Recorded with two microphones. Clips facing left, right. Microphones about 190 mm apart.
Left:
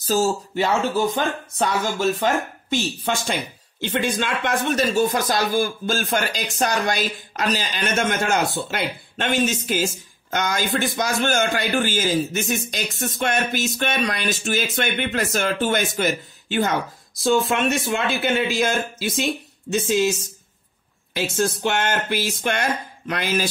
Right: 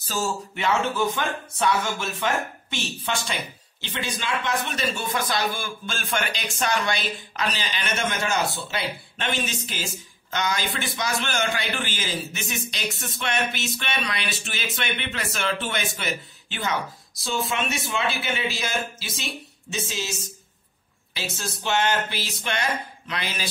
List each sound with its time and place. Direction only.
0.0 s a man's voice: 40° left (ahead or behind)